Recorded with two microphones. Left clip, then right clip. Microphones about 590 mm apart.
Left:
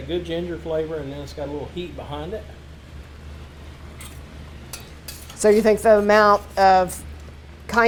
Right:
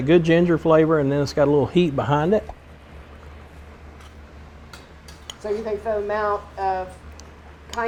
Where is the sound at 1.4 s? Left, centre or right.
Right.